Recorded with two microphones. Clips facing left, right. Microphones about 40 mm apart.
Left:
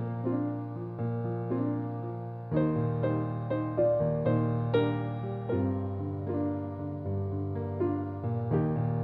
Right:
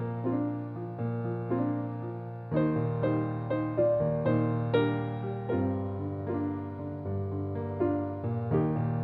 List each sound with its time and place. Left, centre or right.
1.3 s music: centre
8.5 s music: right